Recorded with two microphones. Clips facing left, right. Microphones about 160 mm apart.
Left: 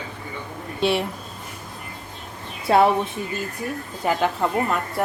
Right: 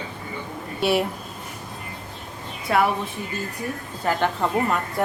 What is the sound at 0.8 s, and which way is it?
Speech, 5° right (ahead or behind).